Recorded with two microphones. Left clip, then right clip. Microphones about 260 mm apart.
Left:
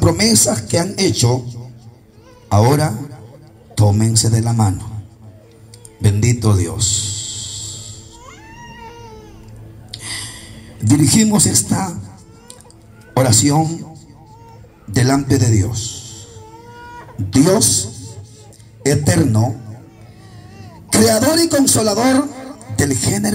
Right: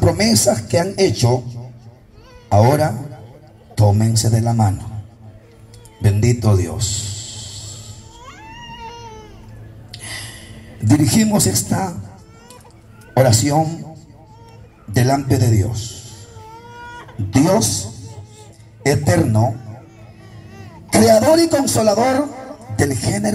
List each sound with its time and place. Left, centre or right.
0.0 s speech: left
5.9 s a sound: left
9.8 s a sound: left
13.1 s speech: left
14.9 s a man's voice: left
17.3 s speech: left
20.9 s a man's voice: left